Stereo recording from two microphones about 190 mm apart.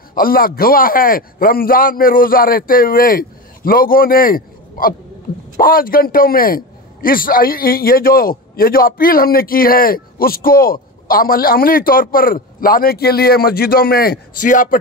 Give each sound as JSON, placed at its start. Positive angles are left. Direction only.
{"t": 0.1, "sound": "a man's voice", "side_deg": 50}